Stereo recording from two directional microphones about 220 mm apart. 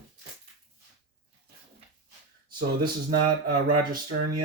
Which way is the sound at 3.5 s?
40° right (ahead or behind).